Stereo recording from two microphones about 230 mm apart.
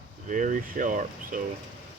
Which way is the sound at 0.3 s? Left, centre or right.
Right.